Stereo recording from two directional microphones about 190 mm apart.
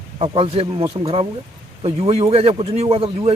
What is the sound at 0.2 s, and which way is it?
Speech, 30° right (ahead or behind).